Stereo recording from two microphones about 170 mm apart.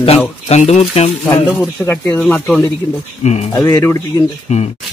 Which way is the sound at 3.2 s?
40° left (ahead or behind).